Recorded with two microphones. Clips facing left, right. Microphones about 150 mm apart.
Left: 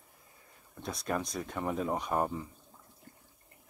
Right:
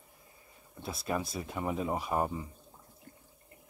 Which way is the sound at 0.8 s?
5° right (ahead or behind).